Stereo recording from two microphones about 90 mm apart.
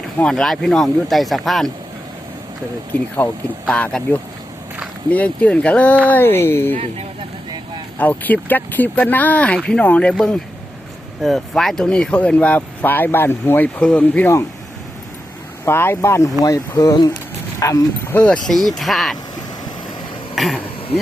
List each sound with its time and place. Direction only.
0.3 s speech: 5° left (ahead or behind)
2.9 s speech: 15° left (ahead or behind)
7.9 s speech: 20° left (ahead or behind)
15.6 s speech: 25° left (ahead or behind)
16.4 s speech: 45° left (ahead or behind)
18.1 s speech: 20° left (ahead or behind)
18.4 s speech: 5° left (ahead or behind)
20.3 s a sound: centre (ahead or behind)